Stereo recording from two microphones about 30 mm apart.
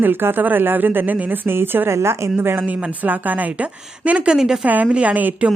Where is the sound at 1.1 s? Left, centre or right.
Right.